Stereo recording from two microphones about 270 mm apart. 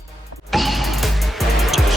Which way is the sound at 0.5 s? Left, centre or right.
Centre.